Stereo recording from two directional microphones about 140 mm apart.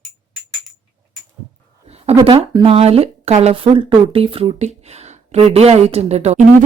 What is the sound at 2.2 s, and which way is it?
Speech, 40° right (ahead or behind).